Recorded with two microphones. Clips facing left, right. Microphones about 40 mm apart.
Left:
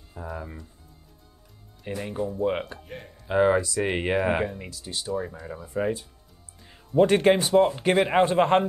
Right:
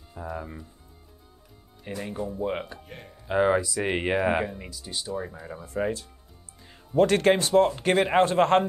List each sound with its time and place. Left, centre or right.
0.1 s speech: centre
1.9 s speech: centre
7.0 s speech: centre
7.5 s speech: centre